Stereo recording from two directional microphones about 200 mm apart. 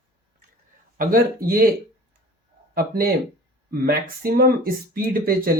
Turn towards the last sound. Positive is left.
turn(degrees=-50)  # may be behind; listen again after turning